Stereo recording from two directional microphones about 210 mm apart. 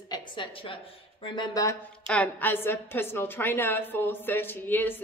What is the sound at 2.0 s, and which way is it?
A woman's voice, 5° left (ahead or behind).